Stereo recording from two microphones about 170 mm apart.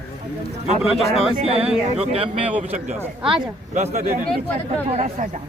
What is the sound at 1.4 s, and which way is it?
A woman's voice, 35° right (ahead or behind).